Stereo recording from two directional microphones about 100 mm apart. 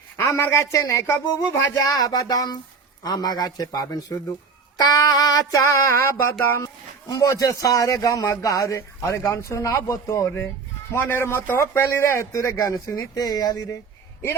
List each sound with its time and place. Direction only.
0.2 s a man's voice: 30° left (ahead or behind)
7.1 s a man's voice: 35° left (ahead or behind)